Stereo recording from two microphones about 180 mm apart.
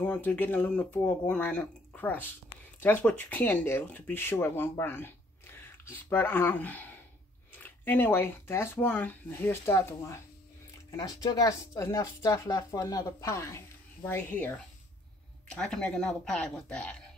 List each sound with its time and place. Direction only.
0.0 s speech: 10° left (ahead or behind)